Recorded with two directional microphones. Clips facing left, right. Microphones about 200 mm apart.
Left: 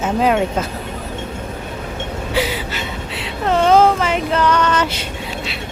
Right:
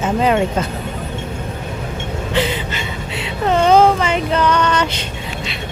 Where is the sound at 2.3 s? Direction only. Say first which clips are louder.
Right 1 dB; 5° left (ahead or behind).